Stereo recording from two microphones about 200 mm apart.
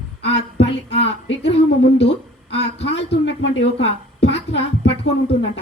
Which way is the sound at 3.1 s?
60° left (ahead or behind).